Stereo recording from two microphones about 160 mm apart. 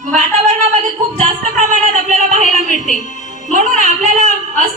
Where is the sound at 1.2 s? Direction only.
50° right (ahead or behind).